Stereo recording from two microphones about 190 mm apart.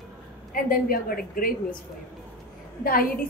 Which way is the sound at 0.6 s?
50° left (ahead or behind).